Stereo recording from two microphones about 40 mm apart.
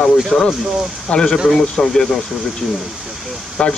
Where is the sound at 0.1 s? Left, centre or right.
Centre.